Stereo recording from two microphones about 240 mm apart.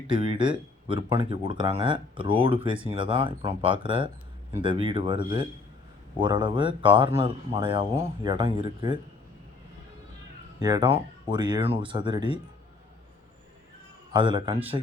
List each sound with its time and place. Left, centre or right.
0.1 s speech: centre
10.6 s speech: centre
14.1 s speech: centre